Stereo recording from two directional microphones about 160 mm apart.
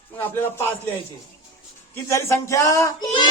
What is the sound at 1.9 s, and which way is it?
Speech, 20° left (ahead or behind).